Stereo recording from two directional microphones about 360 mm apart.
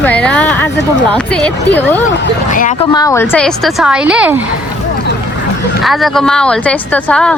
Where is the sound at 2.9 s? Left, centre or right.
Centre.